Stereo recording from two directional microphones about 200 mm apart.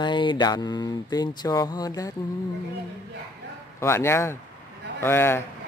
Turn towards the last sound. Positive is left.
turn(degrees=10)  # may be behind; listen again after turning